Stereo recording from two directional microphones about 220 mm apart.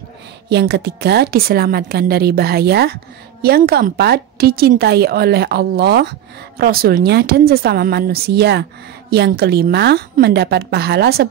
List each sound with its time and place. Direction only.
0.5 s a woman's voice: 50° right (ahead or behind)